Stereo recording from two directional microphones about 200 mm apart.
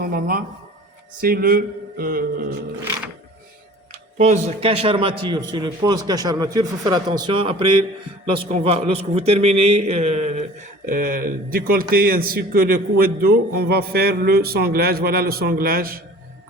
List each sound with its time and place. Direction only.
0.0 s a man's voice: 50° right (ahead or behind)
4.2 s a man's voice: 35° right (ahead or behind)